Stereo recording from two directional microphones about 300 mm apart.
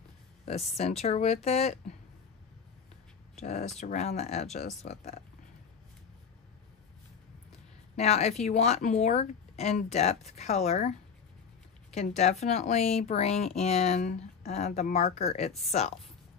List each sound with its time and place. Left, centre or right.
0.7 s speech: left
3.3 s speech: left
7.9 s speech: left